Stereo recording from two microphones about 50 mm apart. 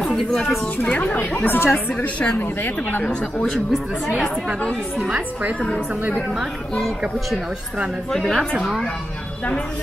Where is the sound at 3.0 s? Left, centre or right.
Centre.